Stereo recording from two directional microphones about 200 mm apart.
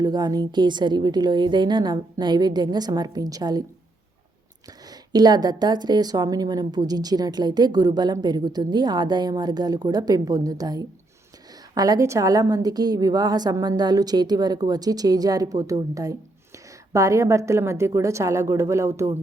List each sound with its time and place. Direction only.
0.0 s a woman's voice: 20° right (ahead or behind)
4.9 s a woman's voice: 20° right (ahead or behind)